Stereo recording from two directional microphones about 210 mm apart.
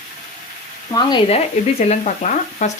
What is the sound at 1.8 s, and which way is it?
Speech, 35° left (ahead or behind).